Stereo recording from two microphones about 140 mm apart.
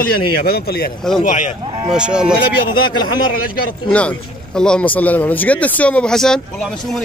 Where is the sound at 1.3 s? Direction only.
65° left (ahead or behind).